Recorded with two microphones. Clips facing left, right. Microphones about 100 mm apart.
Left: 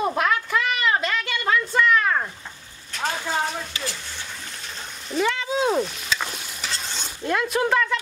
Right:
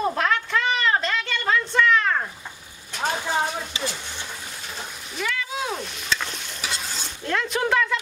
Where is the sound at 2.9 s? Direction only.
15° right (ahead or behind).